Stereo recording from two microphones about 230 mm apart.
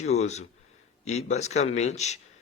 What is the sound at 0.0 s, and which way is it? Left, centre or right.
Speech, left.